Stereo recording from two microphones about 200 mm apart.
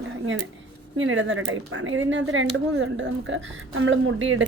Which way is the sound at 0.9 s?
70° right (ahead or behind).